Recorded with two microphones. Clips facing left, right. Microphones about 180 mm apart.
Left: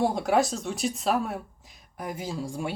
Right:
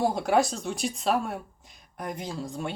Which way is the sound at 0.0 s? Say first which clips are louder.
Even; centre (ahead or behind).